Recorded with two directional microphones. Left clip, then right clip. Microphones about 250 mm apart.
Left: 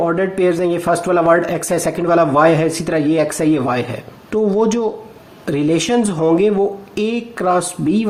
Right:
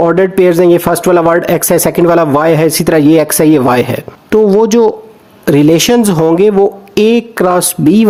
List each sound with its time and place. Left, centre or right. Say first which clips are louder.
0.0 s speech: right 8 dB; right